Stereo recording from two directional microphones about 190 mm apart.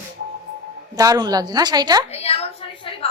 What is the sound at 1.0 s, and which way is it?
A woman's voice, 20° right (ahead or behind).